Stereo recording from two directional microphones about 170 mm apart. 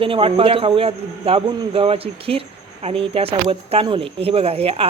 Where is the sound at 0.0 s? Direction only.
30° right (ahead or behind).